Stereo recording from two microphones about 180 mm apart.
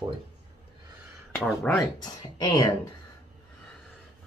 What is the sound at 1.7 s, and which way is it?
Speech, 10° left (ahead or behind).